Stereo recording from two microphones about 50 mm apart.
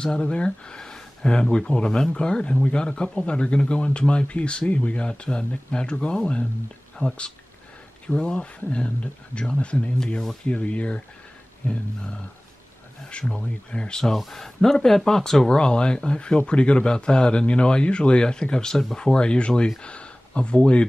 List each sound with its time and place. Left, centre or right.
0.0 s speech: centre
11.6 s a sound: left
13.2 s speech: centre